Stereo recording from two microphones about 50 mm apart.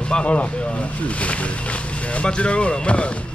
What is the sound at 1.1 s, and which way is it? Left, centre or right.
Speech, left.